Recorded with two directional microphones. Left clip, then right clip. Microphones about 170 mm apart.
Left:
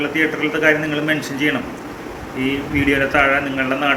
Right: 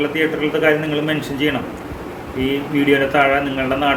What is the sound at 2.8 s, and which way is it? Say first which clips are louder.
A man's voice: right 1 dB; 20° right (ahead or behind).